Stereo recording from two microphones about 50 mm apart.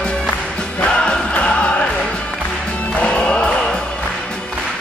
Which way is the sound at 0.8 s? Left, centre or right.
Centre.